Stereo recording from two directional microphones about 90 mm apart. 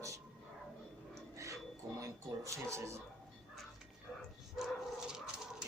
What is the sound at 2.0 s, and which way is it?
Speech, 35° right (ahead or behind).